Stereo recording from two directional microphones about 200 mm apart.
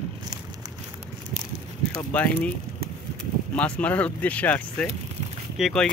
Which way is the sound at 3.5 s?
5° left (ahead or behind).